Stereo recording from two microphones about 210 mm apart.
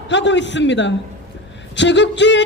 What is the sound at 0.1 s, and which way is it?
A man's voice, 60° left (ahead or behind).